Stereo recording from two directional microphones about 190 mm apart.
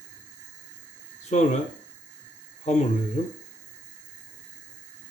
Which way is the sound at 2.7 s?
35° left (ahead or behind).